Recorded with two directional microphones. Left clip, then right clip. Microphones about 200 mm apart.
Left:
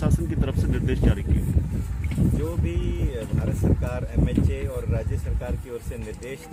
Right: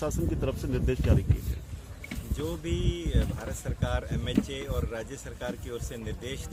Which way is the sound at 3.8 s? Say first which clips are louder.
Left 1 dB; 10° right (ahead or behind).